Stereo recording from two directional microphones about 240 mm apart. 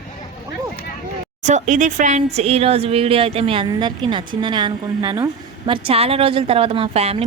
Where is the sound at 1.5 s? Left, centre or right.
Right.